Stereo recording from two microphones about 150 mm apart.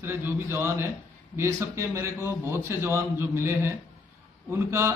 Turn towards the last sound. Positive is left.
turn(degrees=-15)  # may be behind; listen again after turning